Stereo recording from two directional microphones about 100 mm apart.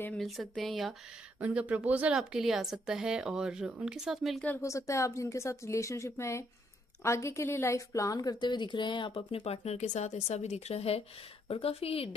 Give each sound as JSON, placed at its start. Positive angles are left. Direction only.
{"t": 0.2, "sound": "speech", "side_deg": 0}
{"t": 1.4, "sound": "speech", "side_deg": -15}
{"t": 4.6, "sound": "speech", "side_deg": 30}
{"t": 9.1, "sound": "a woman's voice", "side_deg": 80}